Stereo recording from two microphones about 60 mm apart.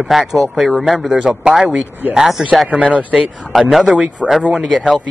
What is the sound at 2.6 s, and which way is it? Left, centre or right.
Speech, right.